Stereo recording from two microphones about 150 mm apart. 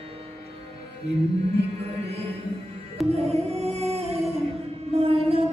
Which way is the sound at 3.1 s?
45° right (ahead or behind).